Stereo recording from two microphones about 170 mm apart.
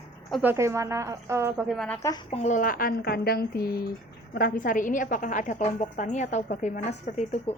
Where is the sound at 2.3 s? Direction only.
45° left (ahead or behind).